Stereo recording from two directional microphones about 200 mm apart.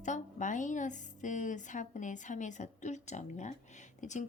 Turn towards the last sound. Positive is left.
turn(degrees=35)  # may be behind; listen again after turning